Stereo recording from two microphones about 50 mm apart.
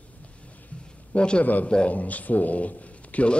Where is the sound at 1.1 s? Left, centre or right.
Left.